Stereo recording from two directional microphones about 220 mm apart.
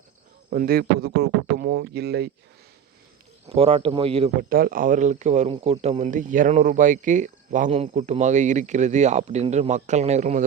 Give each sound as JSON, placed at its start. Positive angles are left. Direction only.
{"t": 0.5, "sound": "speech", "side_deg": -40}
{"t": 3.5, "sound": "speech", "side_deg": -25}
{"t": 4.4, "sound": "speech", "side_deg": -40}